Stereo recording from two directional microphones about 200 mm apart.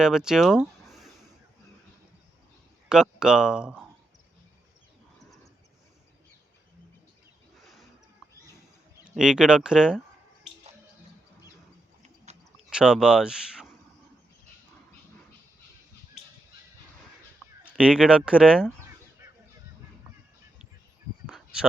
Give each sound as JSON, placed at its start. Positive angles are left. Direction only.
{"t": 0.0, "sound": "speech", "side_deg": -5}
{"t": 2.9, "sound": "speech", "side_deg": -5}
{"t": 9.1, "sound": "speech", "side_deg": -5}
{"t": 12.0, "sound": "clip-clop", "side_deg": -35}
{"t": 12.5, "sound": "speech", "side_deg": -5}
{"t": 17.7, "sound": "speech", "side_deg": -5}
{"t": 21.2, "sound": "a sound", "side_deg": -5}